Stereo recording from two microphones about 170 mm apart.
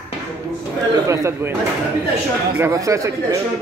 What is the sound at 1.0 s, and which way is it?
Speech, 15° right (ahead or behind).